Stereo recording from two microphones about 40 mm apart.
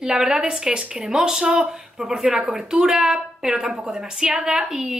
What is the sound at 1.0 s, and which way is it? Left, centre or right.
A woman's voice, centre.